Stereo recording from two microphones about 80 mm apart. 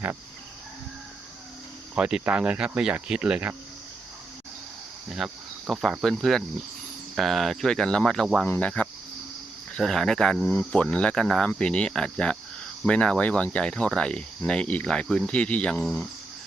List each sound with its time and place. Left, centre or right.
2.0 s speech: centre
5.0 s speech: centre
8.5 s cricket: centre
9.7 s speech: centre
10.5 s cricket: centre